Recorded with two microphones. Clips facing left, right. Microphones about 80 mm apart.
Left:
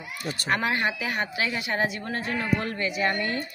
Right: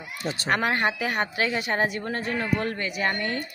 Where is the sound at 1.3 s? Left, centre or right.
Right.